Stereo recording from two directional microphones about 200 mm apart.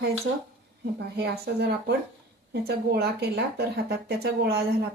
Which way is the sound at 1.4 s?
55° right (ahead or behind).